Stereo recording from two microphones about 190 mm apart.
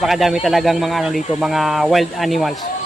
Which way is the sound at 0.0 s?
Centre (ahead or behind).